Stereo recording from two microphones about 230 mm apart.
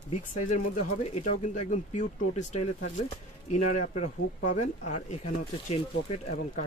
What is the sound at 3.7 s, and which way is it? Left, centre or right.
Speech, left.